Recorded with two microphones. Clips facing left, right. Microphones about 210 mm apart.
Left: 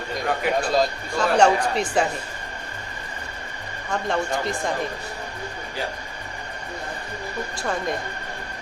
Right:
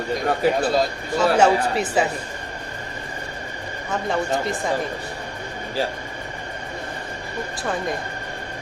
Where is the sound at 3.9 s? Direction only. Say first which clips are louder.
Right 1 dB; 5° right (ahead or behind).